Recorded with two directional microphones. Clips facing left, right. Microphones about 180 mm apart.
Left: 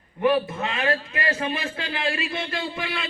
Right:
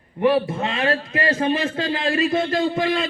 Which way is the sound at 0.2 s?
35° right (ahead or behind).